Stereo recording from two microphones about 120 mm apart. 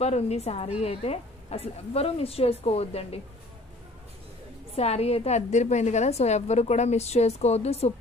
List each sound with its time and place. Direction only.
0.0 s a woman's voice: 65° left (ahead or behind)
4.7 s a woman's voice: 60° left (ahead or behind)